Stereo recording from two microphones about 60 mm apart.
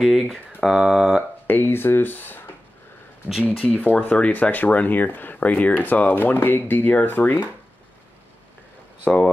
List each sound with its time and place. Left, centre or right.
0.0 s speech: centre
1.5 s speech: left
3.4 s speech: left
9.0 s speech: left